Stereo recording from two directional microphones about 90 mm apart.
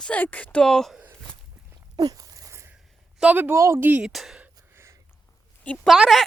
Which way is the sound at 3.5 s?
35° right (ahead or behind).